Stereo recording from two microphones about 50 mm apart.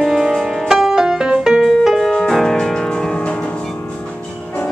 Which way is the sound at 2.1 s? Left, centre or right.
Centre.